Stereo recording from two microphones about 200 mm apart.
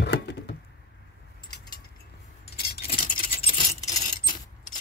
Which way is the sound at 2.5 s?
50° left (ahead or behind).